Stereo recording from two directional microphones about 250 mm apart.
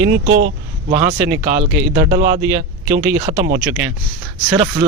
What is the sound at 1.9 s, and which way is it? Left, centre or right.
Speech, centre.